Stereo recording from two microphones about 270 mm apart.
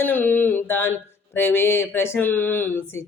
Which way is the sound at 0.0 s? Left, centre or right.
Centre.